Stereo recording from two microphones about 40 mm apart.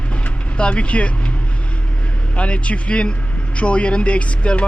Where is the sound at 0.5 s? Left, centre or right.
Left.